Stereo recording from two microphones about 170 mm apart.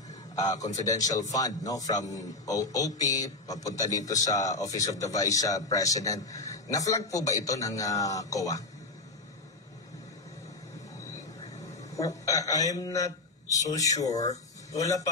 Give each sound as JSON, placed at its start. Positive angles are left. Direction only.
{"t": 0.4, "sound": "a man's voice", "side_deg": 20}
{"t": 11.9, "sound": "a man's voice", "side_deg": 20}